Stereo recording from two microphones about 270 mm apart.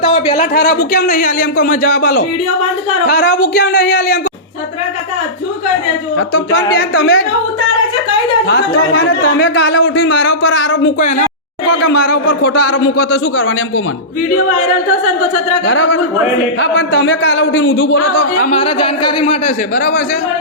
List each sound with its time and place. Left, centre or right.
0.0 s a man's voice: left
6.1 s a man's voice: left
8.4 s speech: left
10.9 s speech: left
11.9 s a man's voice: left
12.7 s speech: left
13.3 s speech: left
15.6 s speech: left
18.4 s speech: left